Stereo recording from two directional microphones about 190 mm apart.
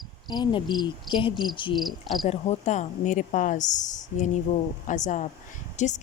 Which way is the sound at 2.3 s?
35° left (ahead or behind).